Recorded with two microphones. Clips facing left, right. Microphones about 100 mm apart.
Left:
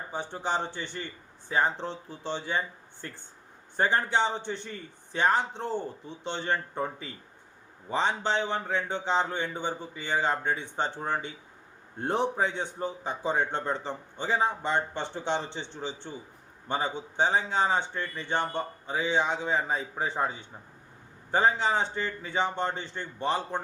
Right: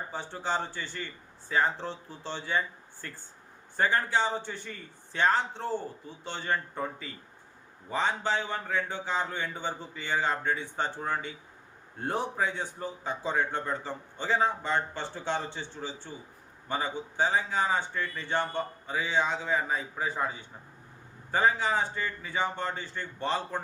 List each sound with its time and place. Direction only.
0.1 s a man's voice: 15° left (ahead or behind)
21.3 s a man's voice: 25° left (ahead or behind)